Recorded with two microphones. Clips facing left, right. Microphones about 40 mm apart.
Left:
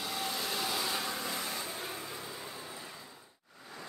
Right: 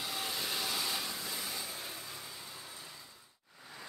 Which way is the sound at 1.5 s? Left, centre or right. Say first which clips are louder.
Left 4 dB; left.